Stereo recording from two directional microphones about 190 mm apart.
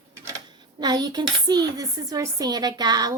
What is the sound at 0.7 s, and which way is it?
Speech, 20° right (ahead or behind).